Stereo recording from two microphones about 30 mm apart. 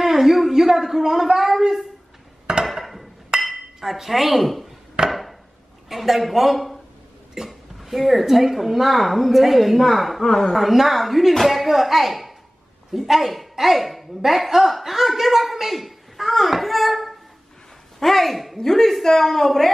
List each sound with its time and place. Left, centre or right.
0.0 s speech: centre
2.6 s a sound: centre
3.5 s speech: centre
5.0 s chop: right
5.9 s a man's voice: centre
10.2 s a woman's voice: centre
10.6 s speech: centre
18.6 s a woman's voice: centre